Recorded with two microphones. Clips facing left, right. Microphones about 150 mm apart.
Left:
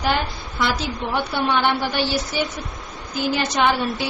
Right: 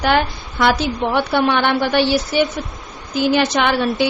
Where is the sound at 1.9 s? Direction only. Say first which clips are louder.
Right 7 dB; 65° right (ahead or behind).